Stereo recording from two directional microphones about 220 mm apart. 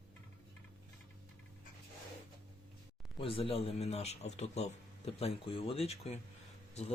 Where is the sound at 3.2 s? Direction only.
25° left (ahead or behind).